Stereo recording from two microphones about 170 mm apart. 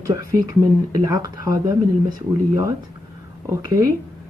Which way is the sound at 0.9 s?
20° right (ahead or behind).